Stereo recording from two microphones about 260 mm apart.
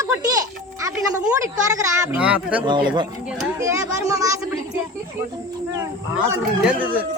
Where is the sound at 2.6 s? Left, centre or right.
Centre.